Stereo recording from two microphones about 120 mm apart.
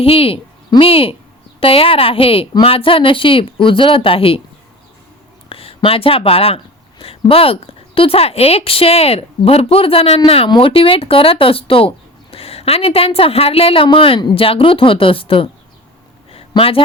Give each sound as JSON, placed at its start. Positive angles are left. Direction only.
{"t": 0.0, "sound": "speech", "side_deg": 50}
{"t": 5.5, "sound": "speech", "side_deg": 50}
{"t": 16.3, "sound": "a sound", "side_deg": 50}